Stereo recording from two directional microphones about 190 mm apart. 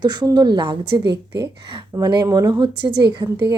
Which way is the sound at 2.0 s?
20° right (ahead or behind).